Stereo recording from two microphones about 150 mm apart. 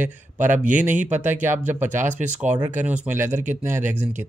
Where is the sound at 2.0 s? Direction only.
55° right (ahead or behind).